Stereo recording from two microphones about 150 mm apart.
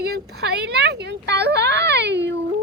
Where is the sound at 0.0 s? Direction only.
90° right.